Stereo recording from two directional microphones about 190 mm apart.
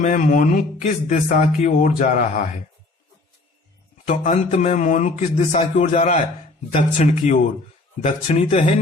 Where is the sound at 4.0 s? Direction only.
40° left (ahead or behind).